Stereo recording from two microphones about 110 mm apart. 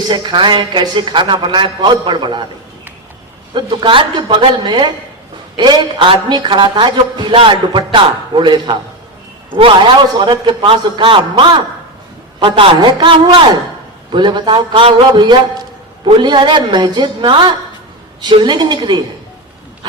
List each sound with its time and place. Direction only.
0.1 s a man's voice: 45° right (ahead or behind)
3.5 s a man's voice: 45° right (ahead or behind)
10.2 s a man's voice: 45° right (ahead or behind)